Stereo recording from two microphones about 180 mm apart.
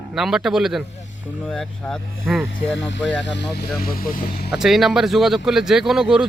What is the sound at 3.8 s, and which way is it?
Speech, 55° left (ahead or behind).